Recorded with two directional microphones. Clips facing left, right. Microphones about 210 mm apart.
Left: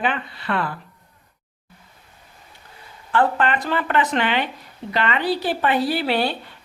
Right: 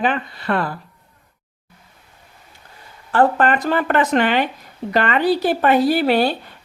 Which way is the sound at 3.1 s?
45° right (ahead or behind).